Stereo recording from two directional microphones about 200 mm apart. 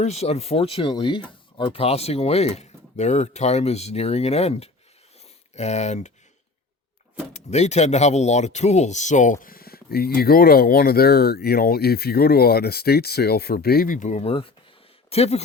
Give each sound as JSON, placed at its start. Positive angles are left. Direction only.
{"t": 0.0, "sound": "speech", "side_deg": 35}
{"t": 7.3, "sound": "speech", "side_deg": 35}